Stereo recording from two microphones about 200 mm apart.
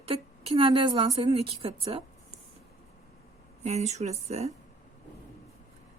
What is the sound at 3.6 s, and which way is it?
Speech, 35° right (ahead or behind).